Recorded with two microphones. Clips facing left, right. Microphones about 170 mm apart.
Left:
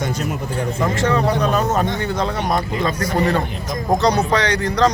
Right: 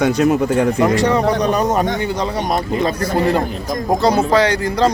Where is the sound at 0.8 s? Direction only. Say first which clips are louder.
Right 4 dB; 15° right (ahead or behind).